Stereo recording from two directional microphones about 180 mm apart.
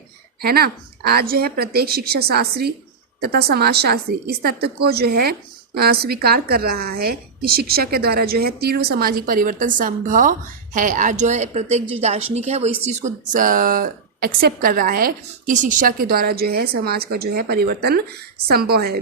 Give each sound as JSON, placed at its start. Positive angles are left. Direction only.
{"t": 0.4, "sound": "a woman's voice", "side_deg": -60}